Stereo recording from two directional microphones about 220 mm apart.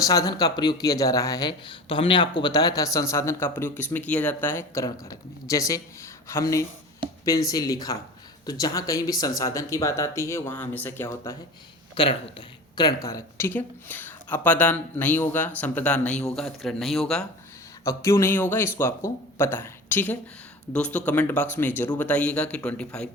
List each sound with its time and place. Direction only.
0.0 s speech: 15° left (ahead or behind)
17.8 s a man's voice: 15° left (ahead or behind)